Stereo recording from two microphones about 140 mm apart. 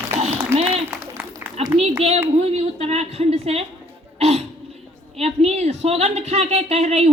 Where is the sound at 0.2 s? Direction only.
50° right (ahead or behind).